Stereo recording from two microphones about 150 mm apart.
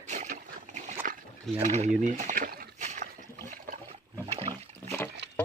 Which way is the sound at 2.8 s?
55° right (ahead or behind).